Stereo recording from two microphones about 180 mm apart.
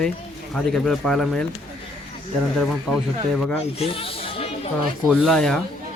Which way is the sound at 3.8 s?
30° left (ahead or behind).